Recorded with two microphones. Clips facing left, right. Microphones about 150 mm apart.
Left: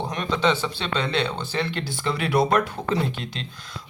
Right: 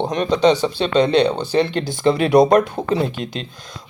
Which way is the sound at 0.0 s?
25° right (ahead or behind).